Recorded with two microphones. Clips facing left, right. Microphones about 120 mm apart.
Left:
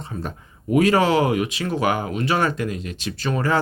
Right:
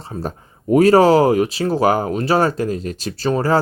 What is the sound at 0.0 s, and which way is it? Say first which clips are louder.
Speech: right 4 dB; 35° right (ahead or behind).